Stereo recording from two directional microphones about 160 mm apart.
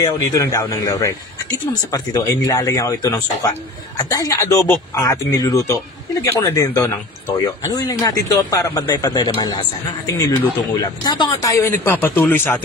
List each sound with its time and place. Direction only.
0.0 s speech: 20° left (ahead or behind)